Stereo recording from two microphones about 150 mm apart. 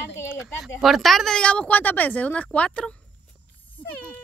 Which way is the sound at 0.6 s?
Centre (ahead or behind).